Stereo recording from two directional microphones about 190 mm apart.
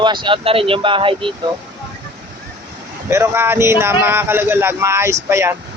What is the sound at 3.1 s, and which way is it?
Speech, 15° right (ahead or behind).